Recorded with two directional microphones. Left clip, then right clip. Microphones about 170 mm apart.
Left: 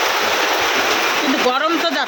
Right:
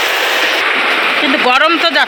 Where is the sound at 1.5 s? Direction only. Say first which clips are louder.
Right 7 dB; centre (ahead or behind).